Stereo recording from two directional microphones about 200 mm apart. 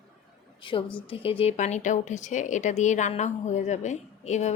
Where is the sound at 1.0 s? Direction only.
25° left (ahead or behind).